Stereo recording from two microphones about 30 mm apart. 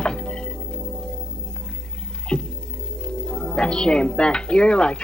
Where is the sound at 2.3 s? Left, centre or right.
Left.